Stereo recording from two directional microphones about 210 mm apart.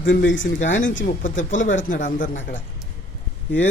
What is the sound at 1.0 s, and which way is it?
A woman's voice, 35° left (ahead or behind).